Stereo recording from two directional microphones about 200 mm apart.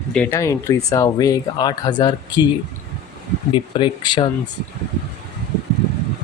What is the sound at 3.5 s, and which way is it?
Speech, 25° left (ahead or behind).